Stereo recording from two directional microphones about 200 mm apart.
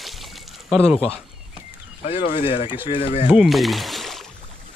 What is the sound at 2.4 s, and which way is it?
Speech, 25° left (ahead or behind).